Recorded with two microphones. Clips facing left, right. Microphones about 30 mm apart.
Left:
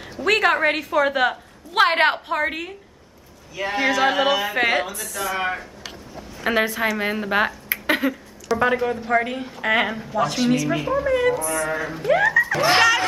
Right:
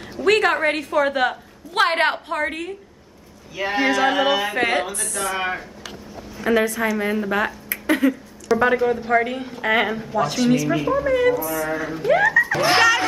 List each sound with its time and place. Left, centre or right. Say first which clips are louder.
0.1 s a woman's voice: right 1 dB; centre
3.5 s a woman's voice: right 1 dB; centre
6.4 s a woman's voice: right 1 dB; left
7.7 s a sound: right 2 dB; left
8.1 s a woman's voice: right 4 dB; centre